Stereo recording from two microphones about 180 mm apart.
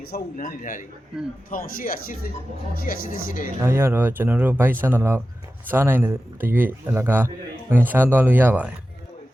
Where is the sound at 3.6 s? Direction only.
15° right (ahead or behind).